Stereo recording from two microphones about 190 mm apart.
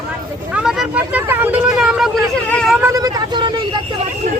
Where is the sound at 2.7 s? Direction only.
15° right (ahead or behind).